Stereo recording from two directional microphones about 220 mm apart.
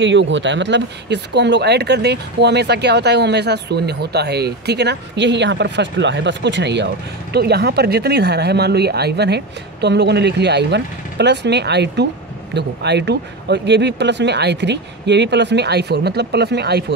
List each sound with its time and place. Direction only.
0.0 s speech: 55° right (ahead or behind)